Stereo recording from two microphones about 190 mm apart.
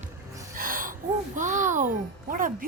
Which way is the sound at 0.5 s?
45° right (ahead or behind).